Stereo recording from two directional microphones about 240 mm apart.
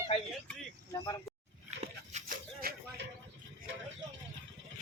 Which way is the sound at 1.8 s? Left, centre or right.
Right.